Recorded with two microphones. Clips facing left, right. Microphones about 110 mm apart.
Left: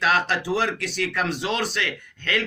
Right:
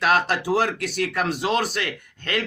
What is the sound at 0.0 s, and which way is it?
A man's voice, 50° right (ahead or behind).